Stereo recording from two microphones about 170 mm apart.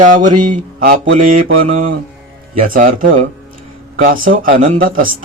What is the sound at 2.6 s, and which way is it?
A man's voice, 50° right (ahead or behind).